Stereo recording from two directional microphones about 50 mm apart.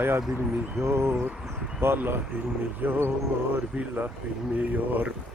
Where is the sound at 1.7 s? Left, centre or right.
Right.